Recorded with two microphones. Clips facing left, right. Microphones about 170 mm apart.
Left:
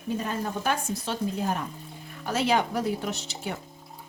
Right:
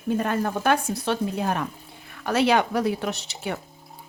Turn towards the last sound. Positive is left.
turn(degrees=-65)  # may be behind; listen again after turning